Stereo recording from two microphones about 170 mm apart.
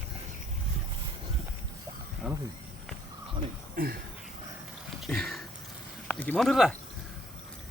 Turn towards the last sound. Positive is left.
turn(degrees=0)  # may be behind; listen again after turning